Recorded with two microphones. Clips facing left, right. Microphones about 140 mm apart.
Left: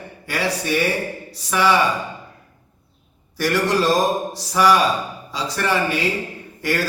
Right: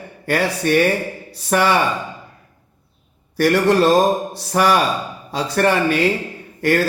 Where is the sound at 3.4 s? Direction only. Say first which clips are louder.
Right 5 dB; 60° right (ahead or behind).